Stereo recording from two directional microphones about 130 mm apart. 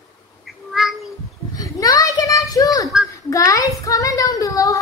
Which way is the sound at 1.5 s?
30° left (ahead or behind).